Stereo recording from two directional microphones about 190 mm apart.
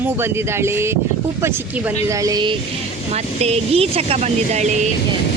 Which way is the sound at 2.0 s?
20° right (ahead or behind).